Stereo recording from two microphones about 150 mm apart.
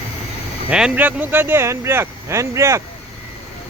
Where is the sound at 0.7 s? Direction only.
5° right (ahead or behind).